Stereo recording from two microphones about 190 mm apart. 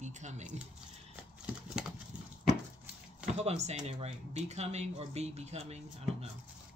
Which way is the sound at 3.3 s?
35° right (ahead or behind).